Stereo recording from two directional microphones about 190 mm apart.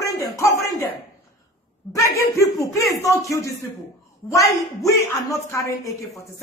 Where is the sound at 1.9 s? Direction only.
15° left (ahead or behind).